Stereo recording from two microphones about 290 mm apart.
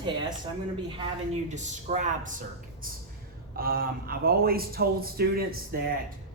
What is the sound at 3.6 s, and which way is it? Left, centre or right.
A man's voice, right.